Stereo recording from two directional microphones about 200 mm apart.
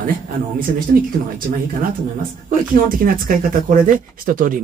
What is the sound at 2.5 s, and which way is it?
A man's voice, 45° right (ahead or behind).